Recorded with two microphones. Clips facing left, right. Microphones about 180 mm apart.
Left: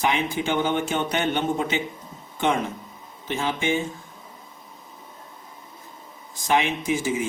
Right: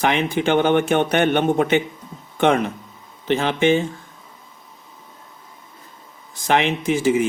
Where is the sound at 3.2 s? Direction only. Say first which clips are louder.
Right 8 dB; 70° right (ahead or behind).